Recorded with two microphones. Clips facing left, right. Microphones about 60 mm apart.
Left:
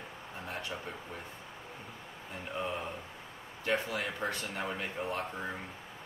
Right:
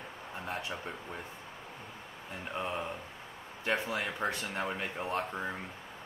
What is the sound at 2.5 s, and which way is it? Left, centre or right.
Speech, centre.